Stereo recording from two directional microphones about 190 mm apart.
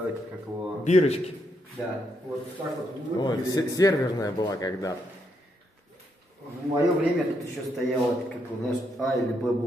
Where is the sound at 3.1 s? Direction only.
20° left (ahead or behind).